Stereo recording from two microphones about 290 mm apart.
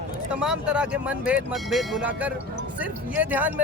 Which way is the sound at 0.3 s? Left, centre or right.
Centre.